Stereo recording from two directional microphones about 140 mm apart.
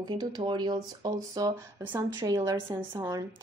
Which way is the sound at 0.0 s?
35° right (ahead or behind).